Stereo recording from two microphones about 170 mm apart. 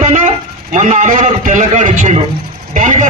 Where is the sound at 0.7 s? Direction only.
45° right (ahead or behind).